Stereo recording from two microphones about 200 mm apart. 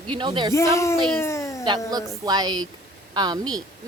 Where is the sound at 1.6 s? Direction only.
20° right (ahead or behind).